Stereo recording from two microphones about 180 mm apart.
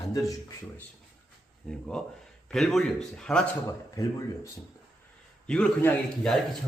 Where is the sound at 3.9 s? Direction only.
20° left (ahead or behind).